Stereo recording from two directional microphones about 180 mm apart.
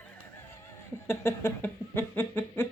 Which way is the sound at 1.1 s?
15° left (ahead or behind).